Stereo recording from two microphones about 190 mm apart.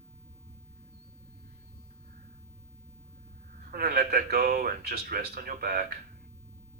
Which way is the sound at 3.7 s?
55° right (ahead or behind).